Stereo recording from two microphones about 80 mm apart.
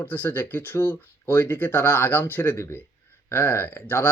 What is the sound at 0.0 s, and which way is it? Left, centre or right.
Speech, left.